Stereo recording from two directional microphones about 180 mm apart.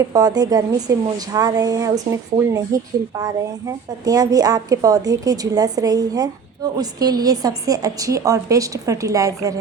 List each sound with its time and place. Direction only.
0.0 s speech: 20° right (ahead or behind)